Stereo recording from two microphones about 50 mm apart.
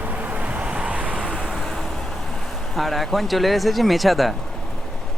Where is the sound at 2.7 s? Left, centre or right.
Centre.